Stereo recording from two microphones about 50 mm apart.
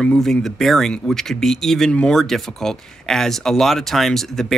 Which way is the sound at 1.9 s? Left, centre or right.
Left.